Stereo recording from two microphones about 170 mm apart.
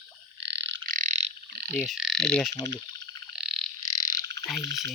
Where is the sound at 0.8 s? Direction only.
50° right (ahead or behind).